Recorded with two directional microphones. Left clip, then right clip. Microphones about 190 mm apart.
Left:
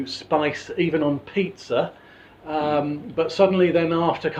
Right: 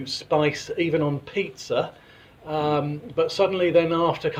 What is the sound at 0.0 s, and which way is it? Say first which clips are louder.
Speech: even; 45° right (ahead or behind).